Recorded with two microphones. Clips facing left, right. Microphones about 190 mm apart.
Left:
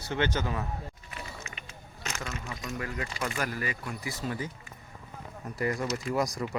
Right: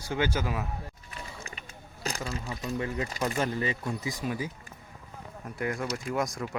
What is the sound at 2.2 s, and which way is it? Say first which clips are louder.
Speech: right 3 dB; 35° right (ahead or behind).